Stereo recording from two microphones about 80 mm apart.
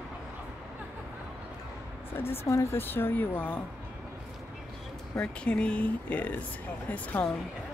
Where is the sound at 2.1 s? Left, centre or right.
Left.